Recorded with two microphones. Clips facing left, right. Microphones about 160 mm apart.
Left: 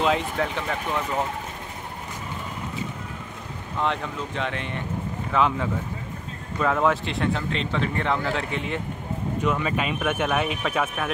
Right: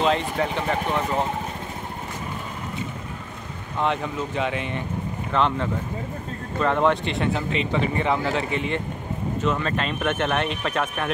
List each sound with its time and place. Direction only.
0.0 s speech: 5° left (ahead or behind)
3.8 s speech: 5° right (ahead or behind)